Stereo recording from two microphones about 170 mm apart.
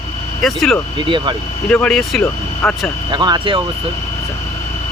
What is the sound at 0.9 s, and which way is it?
Speech, 30° right (ahead or behind).